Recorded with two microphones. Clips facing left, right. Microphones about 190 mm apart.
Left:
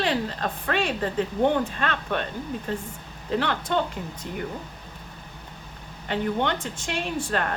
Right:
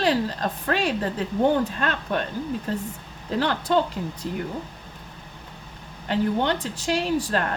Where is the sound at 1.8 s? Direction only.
40° right (ahead or behind).